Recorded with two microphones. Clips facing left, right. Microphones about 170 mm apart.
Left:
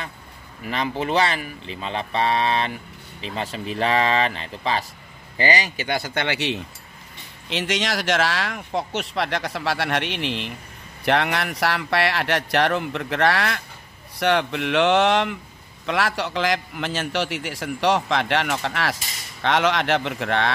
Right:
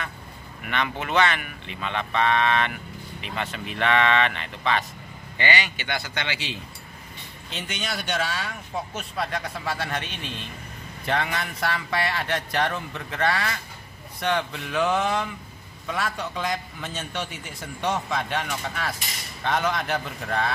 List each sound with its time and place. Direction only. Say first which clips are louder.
0.7 s a man's voice: left 4 dB; 30° left (ahead or behind); by 6.6 s 65° left (ahead or behind)
7.4 s speech: left 8 dB; 90° left
15.9 s a man's voice: left 5 dB; 90° left